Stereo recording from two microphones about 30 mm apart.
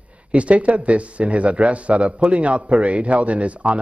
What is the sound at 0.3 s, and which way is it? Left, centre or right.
Speech, right.